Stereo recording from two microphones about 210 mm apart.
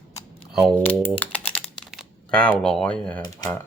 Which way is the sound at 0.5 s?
Centre (ahead or behind).